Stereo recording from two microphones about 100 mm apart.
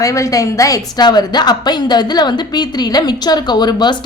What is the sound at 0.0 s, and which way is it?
A woman's voice, 35° left (ahead or behind).